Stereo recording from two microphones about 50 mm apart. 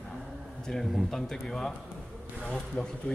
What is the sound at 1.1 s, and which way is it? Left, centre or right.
Speech, centre.